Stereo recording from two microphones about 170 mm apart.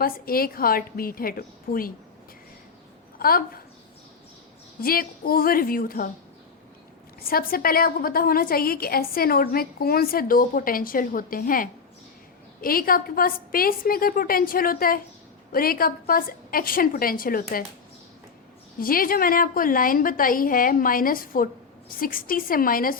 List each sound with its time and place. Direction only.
0.0 s a woman's voice: 60° left (ahead or behind)
3.2 s a woman's voice: 60° left (ahead or behind)
4.8 s a woman's voice: 60° left (ahead or behind)
7.2 s a woman's voice: 60° left (ahead or behind)
18.8 s a woman's voice: 60° left (ahead or behind)